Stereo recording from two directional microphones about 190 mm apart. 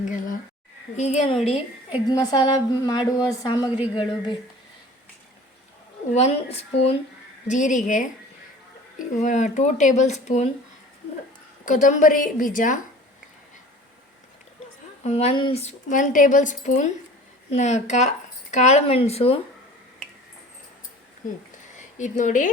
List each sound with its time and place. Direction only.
0.0 s speech: 45° left (ahead or behind)
2.0 s a woman's voice: 20° left (ahead or behind)
6.1 s speech: 35° left (ahead or behind)
11.6 s a woman's voice: 40° left (ahead or behind)
15.0 s speech: 35° left (ahead or behind)
21.8 s speech: 40° left (ahead or behind)